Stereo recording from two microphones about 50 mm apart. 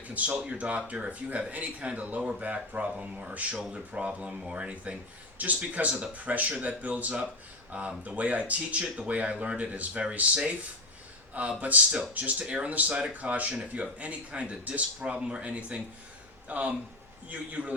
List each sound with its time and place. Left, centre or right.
0.4 s speech: right
12.5 s speech: right